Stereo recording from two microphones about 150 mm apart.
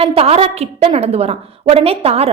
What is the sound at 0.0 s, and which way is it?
A woman's voice, 40° right (ahead or behind).